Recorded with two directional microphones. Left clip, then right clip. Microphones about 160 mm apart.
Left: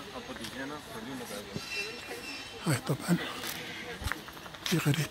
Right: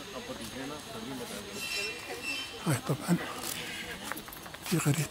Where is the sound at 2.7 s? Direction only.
Centre (ahead or behind).